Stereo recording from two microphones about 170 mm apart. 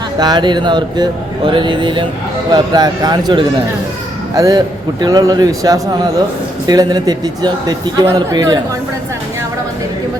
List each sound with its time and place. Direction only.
0.2 s speech: 25° right (ahead or behind)